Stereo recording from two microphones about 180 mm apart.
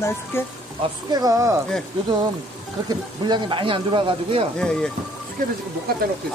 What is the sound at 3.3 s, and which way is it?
Speech, 30° right (ahead or behind).